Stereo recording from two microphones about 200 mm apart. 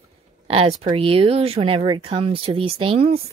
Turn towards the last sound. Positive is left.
turn(degrees=-30)  # may be behind; listen again after turning